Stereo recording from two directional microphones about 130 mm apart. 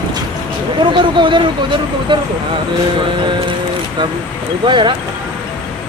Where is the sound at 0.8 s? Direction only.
40° right (ahead or behind).